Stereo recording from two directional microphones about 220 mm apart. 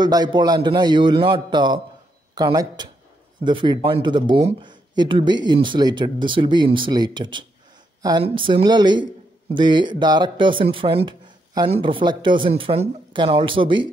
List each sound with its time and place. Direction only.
0.0 s speech: 20° right (ahead or behind)